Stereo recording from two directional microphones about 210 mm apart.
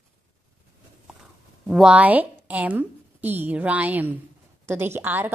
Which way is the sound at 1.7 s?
5° right (ahead or behind).